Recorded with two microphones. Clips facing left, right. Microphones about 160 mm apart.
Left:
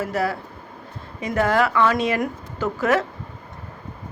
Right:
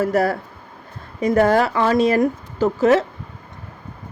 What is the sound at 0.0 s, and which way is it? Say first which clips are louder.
Speech: right 6 dB; 45° right (ahead or behind).